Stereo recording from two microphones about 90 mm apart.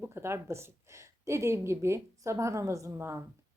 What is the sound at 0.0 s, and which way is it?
A woman's voice, 30° right (ahead or behind).